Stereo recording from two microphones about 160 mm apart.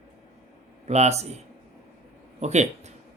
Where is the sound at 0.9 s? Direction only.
45° right (ahead or behind).